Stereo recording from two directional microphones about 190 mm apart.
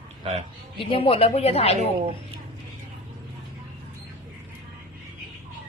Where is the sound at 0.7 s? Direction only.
30° left (ahead or behind).